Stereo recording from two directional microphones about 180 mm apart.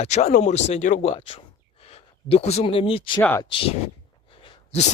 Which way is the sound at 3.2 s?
15° left (ahead or behind).